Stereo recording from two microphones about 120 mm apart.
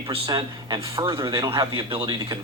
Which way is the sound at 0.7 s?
25° right (ahead or behind).